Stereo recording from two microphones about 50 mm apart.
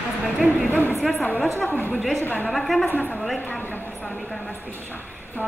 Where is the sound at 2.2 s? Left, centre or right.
Left.